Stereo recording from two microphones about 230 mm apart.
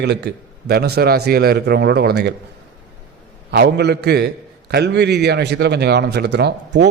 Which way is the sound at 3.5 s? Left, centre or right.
Right.